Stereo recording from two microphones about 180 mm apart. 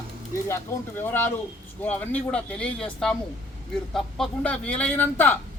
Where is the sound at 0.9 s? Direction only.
10° left (ahead or behind).